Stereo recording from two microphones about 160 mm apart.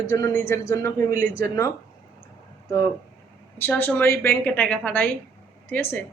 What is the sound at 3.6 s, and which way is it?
A woman's voice, 10° left (ahead or behind).